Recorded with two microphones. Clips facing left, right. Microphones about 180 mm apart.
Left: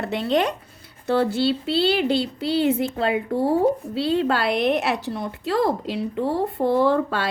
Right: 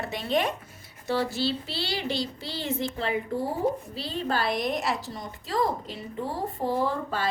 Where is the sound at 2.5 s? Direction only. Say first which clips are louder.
Left 12 dB; 65° left (ahead or behind).